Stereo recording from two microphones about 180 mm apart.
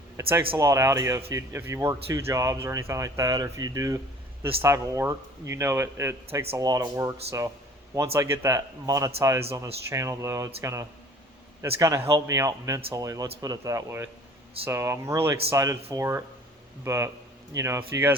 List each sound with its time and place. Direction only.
0.2 s speech: 15° right (ahead or behind)